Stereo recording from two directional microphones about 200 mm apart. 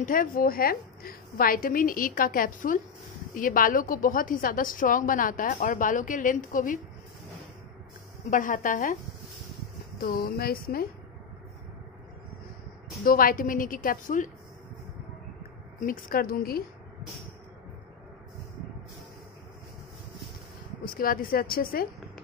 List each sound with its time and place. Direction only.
0.0 s a woman's voice: 45° left (ahead or behind)
8.3 s a woman's voice: 40° left (ahead or behind)
10.0 s a woman's voice: 50° left (ahead or behind)
13.0 s a woman's voice: 45° left (ahead or behind)
15.8 s a woman's voice: 45° left (ahead or behind)
20.8 s a woman's voice: 45° left (ahead or behind)